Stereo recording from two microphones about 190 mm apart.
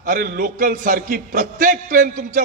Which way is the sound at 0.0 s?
45° right (ahead or behind).